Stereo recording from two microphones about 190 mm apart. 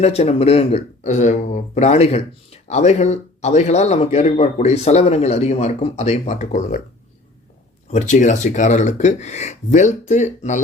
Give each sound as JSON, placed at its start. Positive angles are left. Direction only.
{"t": 0.0, "sound": "speech", "side_deg": 35}
{"t": 7.9, "sound": "speech", "side_deg": 40}